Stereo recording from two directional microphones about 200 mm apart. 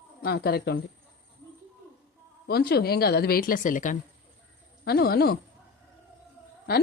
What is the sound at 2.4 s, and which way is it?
A woman's voice, 50° left (ahead or behind).